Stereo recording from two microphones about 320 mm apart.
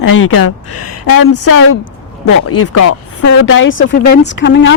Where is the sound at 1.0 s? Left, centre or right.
Left.